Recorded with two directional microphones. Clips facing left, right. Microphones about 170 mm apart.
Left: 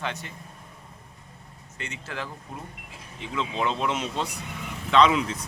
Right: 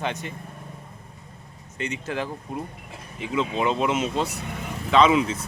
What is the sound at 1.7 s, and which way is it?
Speech, 20° right (ahead or behind).